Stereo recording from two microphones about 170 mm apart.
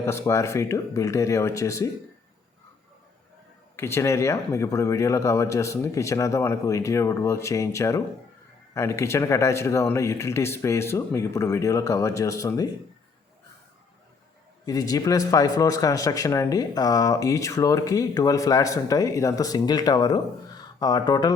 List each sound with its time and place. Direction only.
0.0 s speech: 15° left (ahead or behind)
3.8 s speech: 15° left (ahead or behind)
14.6 s a man's voice: 20° left (ahead or behind)